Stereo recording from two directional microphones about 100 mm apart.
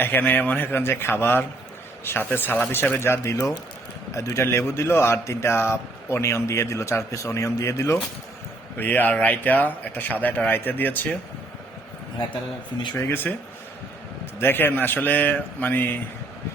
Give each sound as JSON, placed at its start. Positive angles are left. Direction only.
{"t": 0.0, "sound": "speech", "side_deg": 20}
{"t": 8.8, "sound": "a man's voice", "side_deg": 15}
{"t": 13.0, "sound": "speech", "side_deg": 20}
{"t": 14.3, "sound": "speech", "side_deg": 20}